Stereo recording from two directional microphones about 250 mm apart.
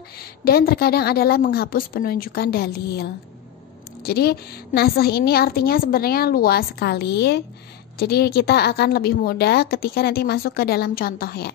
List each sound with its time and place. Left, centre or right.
0.2 s a woman's voice: left